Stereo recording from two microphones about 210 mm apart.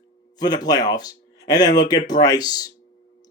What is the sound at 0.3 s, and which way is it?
Speech, 20° left (ahead or behind).